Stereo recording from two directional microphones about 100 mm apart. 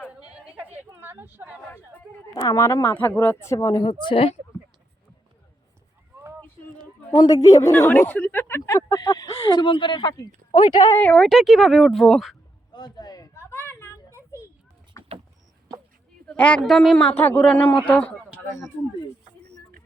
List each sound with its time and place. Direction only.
0.1 s a sound: 10° right (ahead or behind)
2.3 s speech: 35° left (ahead or behind)
2.9 s speech: 20° left (ahead or behind)
3.4 s speech: 30° left (ahead or behind)
4.0 s speech: 65° left (ahead or behind)
7.3 s speech: 35° left (ahead or behind)
7.9 s speech: 20° left (ahead or behind)
9.5 s speech: 50° left (ahead or behind)
11.0 s speech: 10° left (ahead or behind)
11.3 s speech: centre (ahead or behind)
12.7 s a sound: 45° left (ahead or behind)
13.3 s a sound: 25° left (ahead or behind)
16.3 s speech: 10° left (ahead or behind)
17.2 s speech: 20° left (ahead or behind)